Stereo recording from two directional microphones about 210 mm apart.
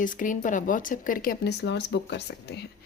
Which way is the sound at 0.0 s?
40° left (ahead or behind).